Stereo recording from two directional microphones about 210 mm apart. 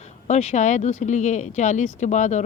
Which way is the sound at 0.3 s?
35° left (ahead or behind).